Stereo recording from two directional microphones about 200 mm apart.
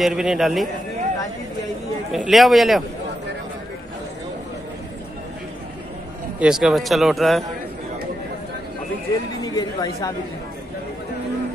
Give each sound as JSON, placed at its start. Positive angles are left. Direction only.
{"t": 0.0, "sound": "speech", "side_deg": 0}
{"t": 2.1, "sound": "speech", "side_deg": 0}
{"t": 6.4, "sound": "speech", "side_deg": 0}
{"t": 9.4, "sound": "a woman's voice", "side_deg": 20}